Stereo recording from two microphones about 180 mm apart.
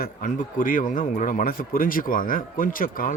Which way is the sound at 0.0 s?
50° left (ahead or behind).